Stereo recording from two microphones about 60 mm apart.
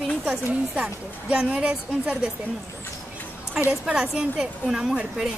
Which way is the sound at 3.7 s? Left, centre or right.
Centre.